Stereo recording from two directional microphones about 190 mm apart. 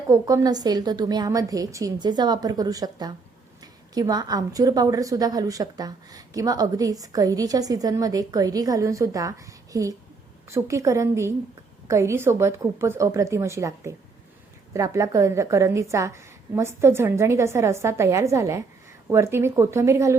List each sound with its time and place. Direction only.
0.1 s a woman's voice: 20° right (ahead or behind)